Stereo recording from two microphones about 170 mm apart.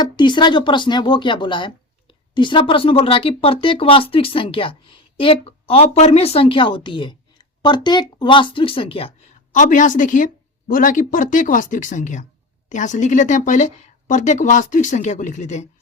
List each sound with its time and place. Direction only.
0.0 s speech: 25° left (ahead or behind)
9.5 s speech: 50° left (ahead or behind)